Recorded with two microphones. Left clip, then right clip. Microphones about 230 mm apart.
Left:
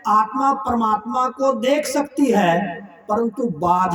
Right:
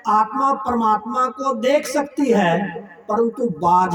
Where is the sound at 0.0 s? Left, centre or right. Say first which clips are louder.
Even; centre.